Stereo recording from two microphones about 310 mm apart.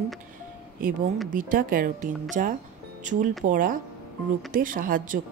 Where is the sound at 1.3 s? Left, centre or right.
Right.